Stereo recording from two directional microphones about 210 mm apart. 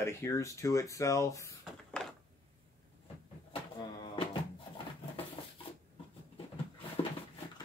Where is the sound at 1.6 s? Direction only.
5° left (ahead or behind).